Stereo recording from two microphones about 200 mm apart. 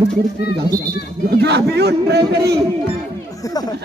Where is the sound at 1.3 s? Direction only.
55° right (ahead or behind).